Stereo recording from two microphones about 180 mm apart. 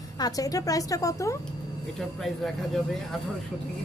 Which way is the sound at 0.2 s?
20° left (ahead or behind).